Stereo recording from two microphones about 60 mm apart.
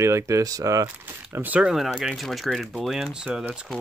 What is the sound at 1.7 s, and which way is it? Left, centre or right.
Speech, centre.